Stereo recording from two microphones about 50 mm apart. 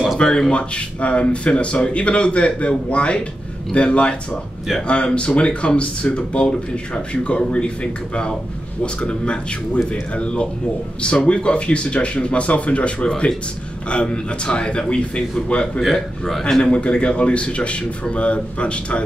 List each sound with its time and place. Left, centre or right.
0.2 s speech: centre
15.8 s a man's voice: centre
16.7 s speech: left